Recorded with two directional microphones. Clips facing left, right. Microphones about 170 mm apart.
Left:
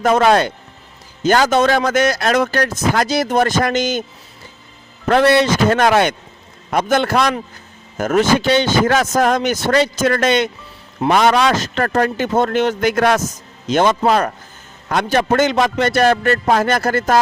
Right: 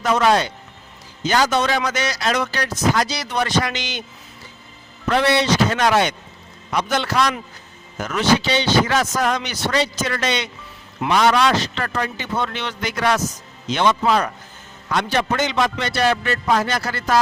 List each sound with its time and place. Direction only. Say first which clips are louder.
0.0 s speech: left 4 dB; 50° left (ahead or behind)
5.0 s speech: left 5 dB; 50° left (ahead or behind)